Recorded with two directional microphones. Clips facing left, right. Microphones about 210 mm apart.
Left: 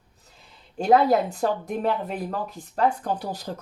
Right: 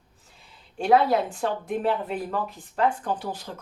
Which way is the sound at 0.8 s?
40° left (ahead or behind).